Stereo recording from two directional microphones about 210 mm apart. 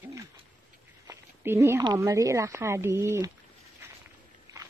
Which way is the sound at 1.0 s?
10° right (ahead or behind).